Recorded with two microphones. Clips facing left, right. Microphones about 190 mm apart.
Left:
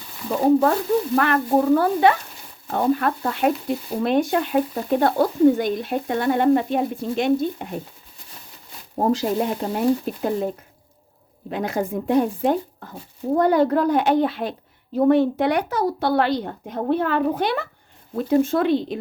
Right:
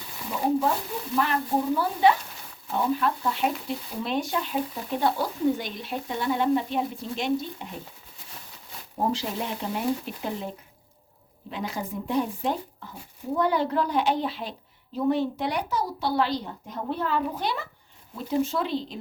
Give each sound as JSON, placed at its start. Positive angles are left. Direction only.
{"t": 0.3, "sound": "speech", "side_deg": 65}
{"t": 9.0, "sound": "speech", "side_deg": 45}
{"t": 11.5, "sound": "speech", "side_deg": 50}